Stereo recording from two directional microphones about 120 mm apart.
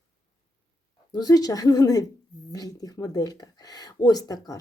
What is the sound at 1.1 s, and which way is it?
Speech, 30° left (ahead or behind).